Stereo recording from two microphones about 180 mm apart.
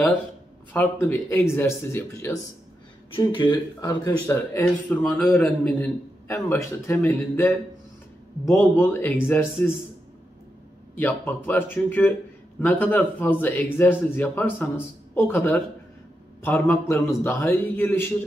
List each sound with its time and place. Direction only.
0.7 s a man's voice: 10° left (ahead or behind)
3.2 s speech: 25° left (ahead or behind)
4.3 s a man's voice: 10° left (ahead or behind)
11.0 s a man's voice: 10° left (ahead or behind)